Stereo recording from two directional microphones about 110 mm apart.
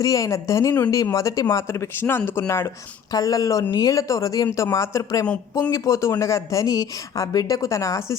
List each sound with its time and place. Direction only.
0.0 s speech: 30° left (ahead or behind)